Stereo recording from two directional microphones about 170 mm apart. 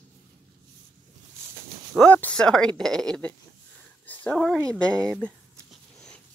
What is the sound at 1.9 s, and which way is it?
Speech, 10° left (ahead or behind).